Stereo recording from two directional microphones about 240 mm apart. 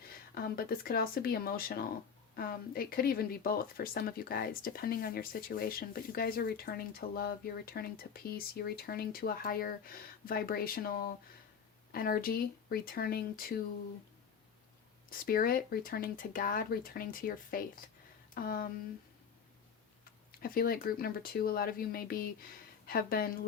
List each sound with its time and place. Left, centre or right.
0.1 s speech: left
15.1 s speech: left
20.4 s speech: left